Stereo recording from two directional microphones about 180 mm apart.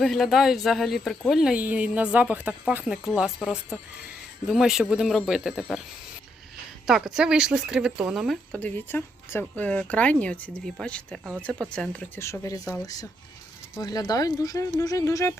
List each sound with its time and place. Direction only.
0.0 s speech: centre (ahead or behind)
6.8 s speech: centre (ahead or behind); by 15.4 s 15° left (ahead or behind)